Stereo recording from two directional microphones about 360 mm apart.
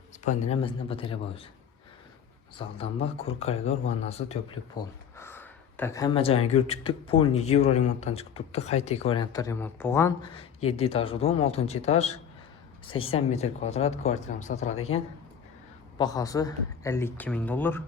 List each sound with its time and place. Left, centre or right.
0.3 s speech: centre
2.6 s speech: centre